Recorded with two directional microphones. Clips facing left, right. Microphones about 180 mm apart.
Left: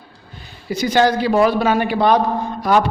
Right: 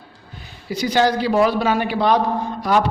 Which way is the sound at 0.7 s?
50° left (ahead or behind).